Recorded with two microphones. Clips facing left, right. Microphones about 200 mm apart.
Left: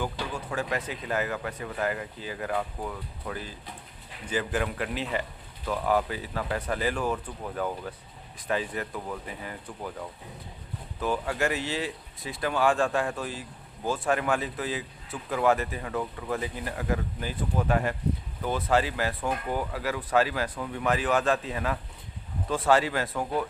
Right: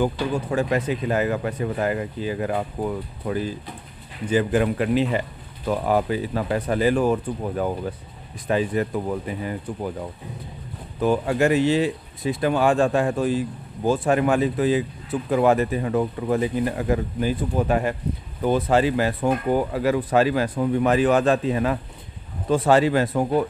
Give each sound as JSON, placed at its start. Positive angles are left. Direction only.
{"t": 0.3, "sound": "speech", "side_deg": -25}